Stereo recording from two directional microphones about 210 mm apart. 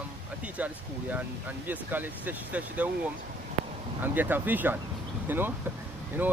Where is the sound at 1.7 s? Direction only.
10° right (ahead or behind).